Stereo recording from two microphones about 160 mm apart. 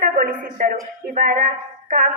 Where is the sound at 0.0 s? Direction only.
60° right (ahead or behind).